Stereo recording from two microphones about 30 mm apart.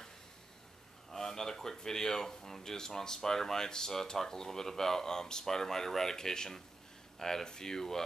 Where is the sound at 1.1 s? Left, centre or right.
Centre.